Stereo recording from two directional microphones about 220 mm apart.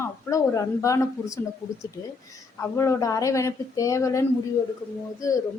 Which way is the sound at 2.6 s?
15° left (ahead or behind).